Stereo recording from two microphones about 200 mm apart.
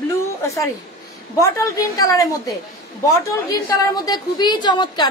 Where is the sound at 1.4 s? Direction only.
15° left (ahead or behind).